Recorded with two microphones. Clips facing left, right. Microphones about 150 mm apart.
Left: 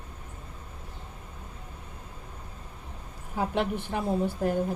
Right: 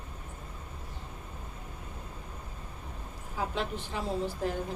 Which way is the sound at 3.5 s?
55° left (ahead or behind).